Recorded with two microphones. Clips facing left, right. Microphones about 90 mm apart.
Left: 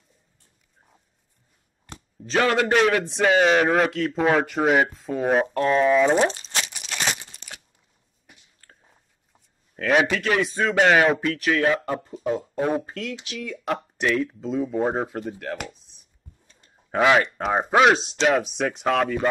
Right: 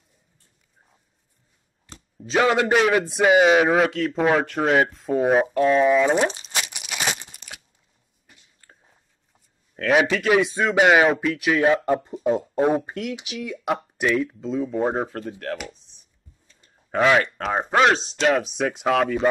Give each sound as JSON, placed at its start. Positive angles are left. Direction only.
{"t": 1.9, "sound": "a sound", "side_deg": 60}
{"t": 2.2, "sound": "a man's voice", "side_deg": -10}
{"t": 4.9, "sound": "a sound", "side_deg": 0}
{"t": 9.8, "sound": "a man's voice", "side_deg": 0}
{"t": 11.6, "sound": "speech", "side_deg": -20}
{"t": 15.0, "sound": "speech", "side_deg": 10}
{"t": 16.9, "sound": "speech", "side_deg": 10}